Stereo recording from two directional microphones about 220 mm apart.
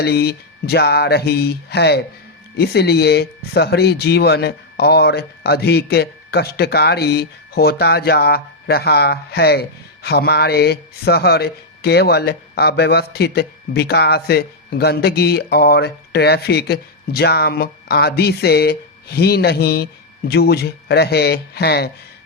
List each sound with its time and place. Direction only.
0.0 s speech: 45° left (ahead or behind)